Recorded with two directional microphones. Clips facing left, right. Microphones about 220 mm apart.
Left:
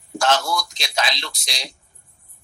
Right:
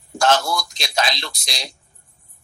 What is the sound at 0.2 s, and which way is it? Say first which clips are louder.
A man's voice: right 2 dB; 45° right (ahead or behind).